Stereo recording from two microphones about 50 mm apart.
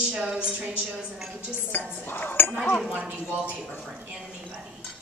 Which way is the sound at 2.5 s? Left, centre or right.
Left.